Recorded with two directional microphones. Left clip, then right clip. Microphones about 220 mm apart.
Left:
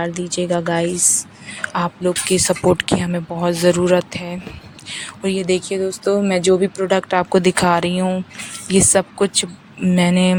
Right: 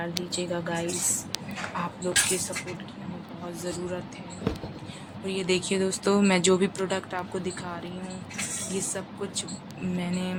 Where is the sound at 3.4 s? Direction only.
45° left (ahead or behind).